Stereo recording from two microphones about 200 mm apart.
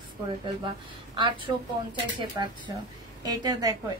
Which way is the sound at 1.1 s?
25° right (ahead or behind).